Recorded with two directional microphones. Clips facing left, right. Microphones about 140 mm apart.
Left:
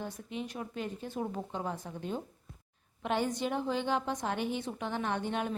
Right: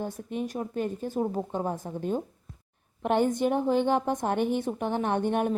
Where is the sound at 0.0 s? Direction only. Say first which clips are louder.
Right 7 dB; 50° right (ahead or behind).